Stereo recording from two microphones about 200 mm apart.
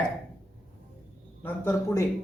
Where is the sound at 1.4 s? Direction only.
10° left (ahead or behind).